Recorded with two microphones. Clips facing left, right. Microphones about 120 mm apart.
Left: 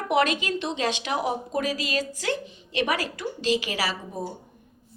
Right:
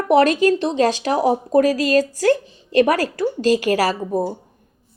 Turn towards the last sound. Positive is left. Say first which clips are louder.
# right 10 dB
turn(degrees=-45)  # may be behind; listen again after turning